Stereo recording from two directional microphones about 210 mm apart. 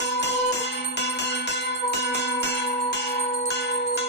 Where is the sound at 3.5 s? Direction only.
55° left (ahead or behind).